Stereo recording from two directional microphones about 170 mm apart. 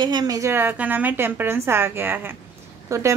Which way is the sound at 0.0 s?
25° right (ahead or behind).